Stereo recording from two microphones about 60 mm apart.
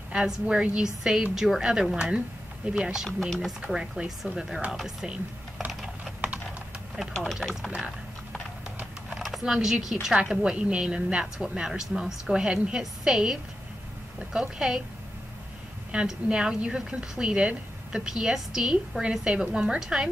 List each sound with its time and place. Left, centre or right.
0.1 s a woman's voice: centre
3.1 s speech: centre
3.7 s a woman's voice: centre
5.7 s typing: centre
7.2 s speech: centre
9.1 s a woman's voice: centre
16.1 s a woman's voice: centre